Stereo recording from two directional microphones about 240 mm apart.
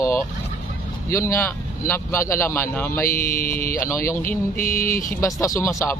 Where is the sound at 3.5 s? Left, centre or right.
Left.